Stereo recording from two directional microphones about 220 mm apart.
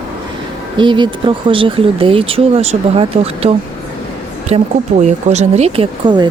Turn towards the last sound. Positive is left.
turn(degrees=-20)  # may be behind; listen again after turning